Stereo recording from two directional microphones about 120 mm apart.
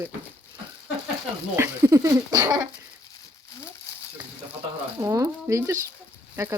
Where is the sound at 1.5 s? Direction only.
25° right (ahead or behind).